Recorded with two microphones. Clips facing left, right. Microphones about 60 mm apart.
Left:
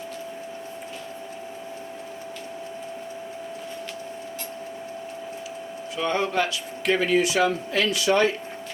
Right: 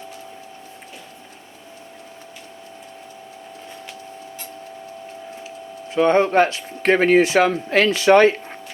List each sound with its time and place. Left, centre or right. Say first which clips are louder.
5.9 s speech: right 9 dB; right